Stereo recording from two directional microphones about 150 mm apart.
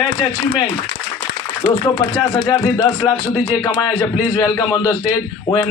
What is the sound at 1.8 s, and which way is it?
Speech, 25° left (ahead or behind).